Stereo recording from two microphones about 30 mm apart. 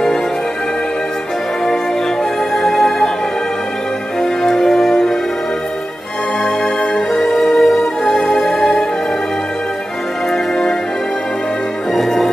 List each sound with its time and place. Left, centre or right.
2.5 s music: centre
4.2 s music: centre
7.2 s music: centre
11.9 s music: centre